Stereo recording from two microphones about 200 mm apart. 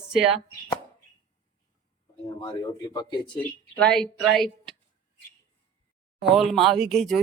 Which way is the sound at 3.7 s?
5° left (ahead or behind).